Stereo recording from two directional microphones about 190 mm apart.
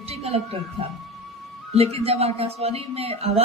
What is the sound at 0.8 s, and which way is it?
A woman's voice, 30° right (ahead or behind).